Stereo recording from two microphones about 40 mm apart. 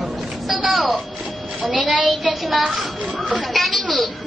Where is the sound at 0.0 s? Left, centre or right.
Centre.